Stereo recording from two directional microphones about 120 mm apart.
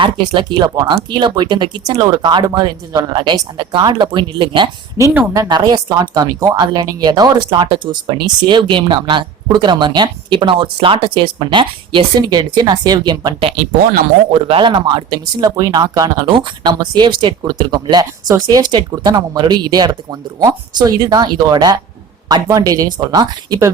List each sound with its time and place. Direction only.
0.0 s speech: 45° right (ahead or behind)
5.3 s speech: 30° right (ahead or behind)
14.3 s speech: 50° right (ahead or behind); by 23.7 s 30° right (ahead or behind)